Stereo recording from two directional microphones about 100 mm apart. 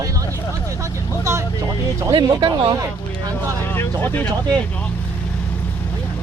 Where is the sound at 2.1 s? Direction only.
50° right (ahead or behind).